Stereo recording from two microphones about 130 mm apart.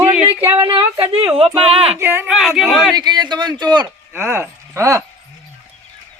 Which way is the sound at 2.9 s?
30° right (ahead or behind).